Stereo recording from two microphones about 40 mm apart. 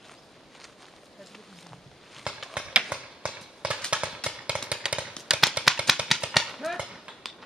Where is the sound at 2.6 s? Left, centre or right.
Right.